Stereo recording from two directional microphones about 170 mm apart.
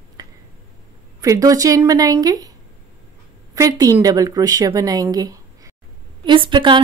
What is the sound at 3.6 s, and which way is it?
A woman's voice, 20° right (ahead or behind).